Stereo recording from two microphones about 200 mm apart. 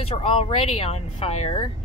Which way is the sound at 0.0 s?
30° left (ahead or behind).